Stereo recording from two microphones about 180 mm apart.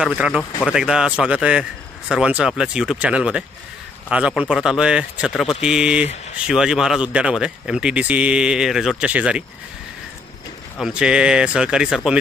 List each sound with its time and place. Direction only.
0.0 s speech: 5° right (ahead or behind)
10.8 s speech: 5° right (ahead or behind)